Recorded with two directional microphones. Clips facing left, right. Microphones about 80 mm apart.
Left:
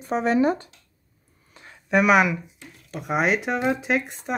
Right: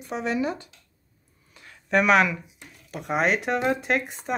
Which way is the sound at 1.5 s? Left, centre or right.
Left.